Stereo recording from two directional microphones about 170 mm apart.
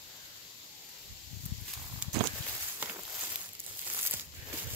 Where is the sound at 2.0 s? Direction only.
10° right (ahead or behind).